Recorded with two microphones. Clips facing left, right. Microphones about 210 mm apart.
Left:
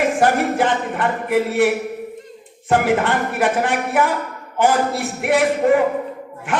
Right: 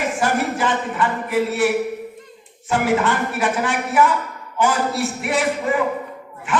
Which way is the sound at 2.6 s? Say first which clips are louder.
Left 2 dB; 55° left (ahead or behind).